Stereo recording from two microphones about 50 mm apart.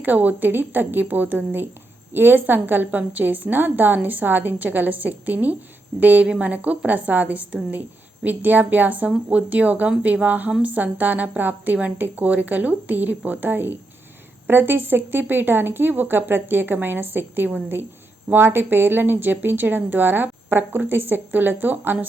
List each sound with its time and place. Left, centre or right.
0.0 s a woman's voice: right